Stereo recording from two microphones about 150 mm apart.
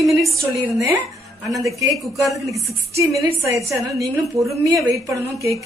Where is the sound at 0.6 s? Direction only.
20° right (ahead or behind).